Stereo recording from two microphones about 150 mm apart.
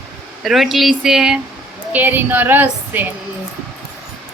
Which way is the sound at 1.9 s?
10° right (ahead or behind).